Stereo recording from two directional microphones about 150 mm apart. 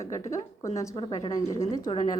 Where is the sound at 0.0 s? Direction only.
20° left (ahead or behind).